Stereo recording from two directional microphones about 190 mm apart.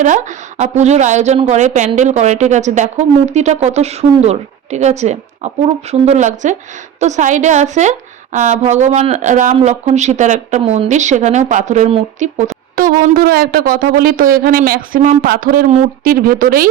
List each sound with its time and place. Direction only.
0.0 s speech: 40° right (ahead or behind)
12.7 s speech: 50° right (ahead or behind)